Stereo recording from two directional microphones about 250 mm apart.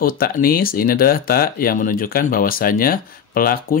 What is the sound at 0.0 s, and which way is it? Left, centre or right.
Speech, left.